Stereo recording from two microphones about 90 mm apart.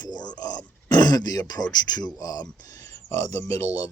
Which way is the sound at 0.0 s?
50° left (ahead or behind).